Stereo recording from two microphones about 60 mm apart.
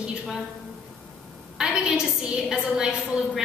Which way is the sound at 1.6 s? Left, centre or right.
Centre.